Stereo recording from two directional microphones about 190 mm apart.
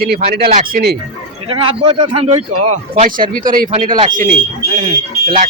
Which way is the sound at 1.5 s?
25° right (ahead or behind).